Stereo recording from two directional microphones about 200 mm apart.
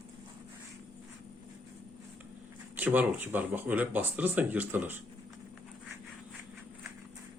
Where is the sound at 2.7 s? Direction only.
10° right (ahead or behind).